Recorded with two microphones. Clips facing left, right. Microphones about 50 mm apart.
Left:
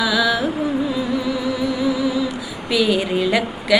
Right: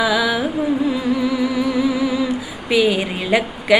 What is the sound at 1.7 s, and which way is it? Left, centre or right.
Humming, right.